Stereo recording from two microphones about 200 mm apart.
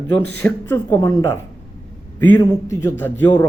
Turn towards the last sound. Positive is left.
turn(degrees=10)  # may be behind; listen again after turning